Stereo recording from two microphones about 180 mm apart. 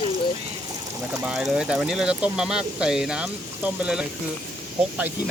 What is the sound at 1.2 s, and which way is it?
Speech, 5° right (ahead or behind).